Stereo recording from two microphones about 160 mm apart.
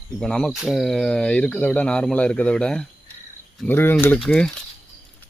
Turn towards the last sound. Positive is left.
turn(degrees=5)  # may be behind; listen again after turning